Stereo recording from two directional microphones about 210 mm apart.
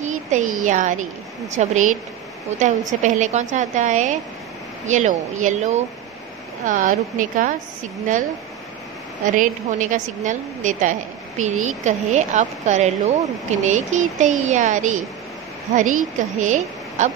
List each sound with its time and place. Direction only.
0.0 s a woman's voice: 35° right (ahead or behind)
3.0 s a woman's voice: 35° right (ahead or behind)
9.2 s a woman's voice: 35° right (ahead or behind)
16.2 s a woman's voice: 35° right (ahead or behind)